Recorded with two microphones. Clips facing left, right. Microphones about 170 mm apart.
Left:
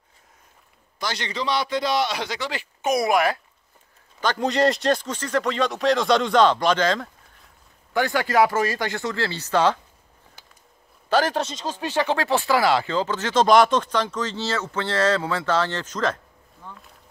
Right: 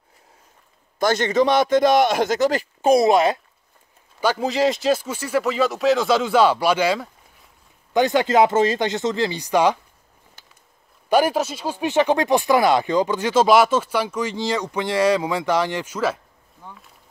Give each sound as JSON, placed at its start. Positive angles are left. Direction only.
{"t": 0.9, "sound": "a man's voice", "side_deg": -50}
{"t": 4.2, "sound": "speech", "side_deg": -5}
{"t": 7.9, "sound": "speech", "side_deg": -20}
{"t": 11.1, "sound": "speech", "side_deg": -10}